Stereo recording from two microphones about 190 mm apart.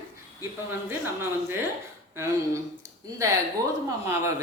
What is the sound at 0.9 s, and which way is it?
Speech, 15° right (ahead or behind).